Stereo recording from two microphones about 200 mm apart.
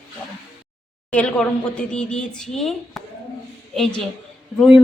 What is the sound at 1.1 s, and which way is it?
A woman's voice, 5° left (ahead or behind).